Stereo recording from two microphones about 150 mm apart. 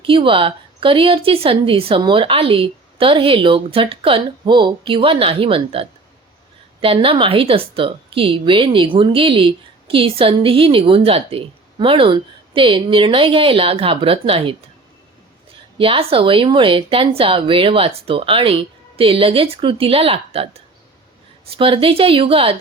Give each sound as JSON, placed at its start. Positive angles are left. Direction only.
{"t": 0.0, "sound": "a woman's voice", "side_deg": -35}
{"t": 15.8, "sound": "a woman's voice", "side_deg": -40}
{"t": 21.6, "sound": "a woman's voice", "side_deg": -35}